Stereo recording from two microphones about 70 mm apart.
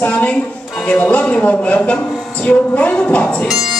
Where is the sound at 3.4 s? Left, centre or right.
Centre.